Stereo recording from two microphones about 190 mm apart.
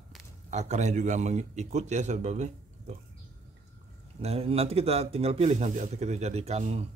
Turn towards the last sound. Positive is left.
turn(degrees=-35)  # may be behind; listen again after turning